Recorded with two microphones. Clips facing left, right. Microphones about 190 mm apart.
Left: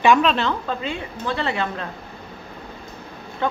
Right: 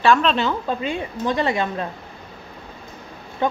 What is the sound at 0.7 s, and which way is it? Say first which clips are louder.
A woman's voice: right 3 dB; 15° right (ahead or behind).